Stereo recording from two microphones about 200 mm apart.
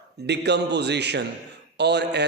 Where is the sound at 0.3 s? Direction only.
60° right (ahead or behind).